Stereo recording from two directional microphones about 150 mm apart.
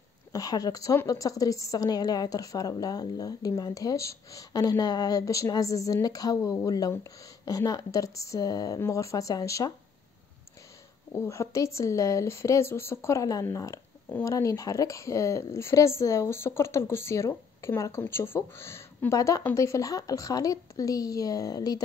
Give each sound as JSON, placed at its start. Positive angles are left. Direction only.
{"t": 0.3, "sound": "a woman's voice", "side_deg": 25}
{"t": 11.1, "sound": "a woman's voice", "side_deg": 20}